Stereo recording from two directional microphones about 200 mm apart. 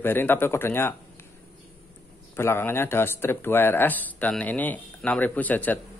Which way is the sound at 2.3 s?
10° left (ahead or behind).